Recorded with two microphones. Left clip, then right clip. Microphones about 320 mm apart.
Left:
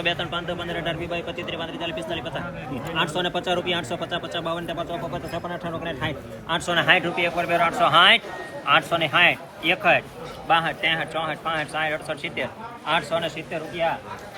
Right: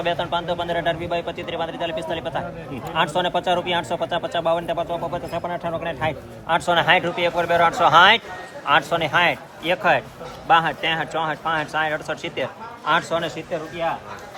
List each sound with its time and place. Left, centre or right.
0.0 s a man's voice: right
3.0 s speech: centre
6.0 s a man's voice: centre